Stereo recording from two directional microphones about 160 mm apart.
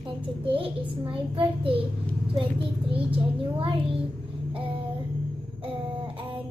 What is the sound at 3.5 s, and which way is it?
Speech, 35° right (ahead or behind).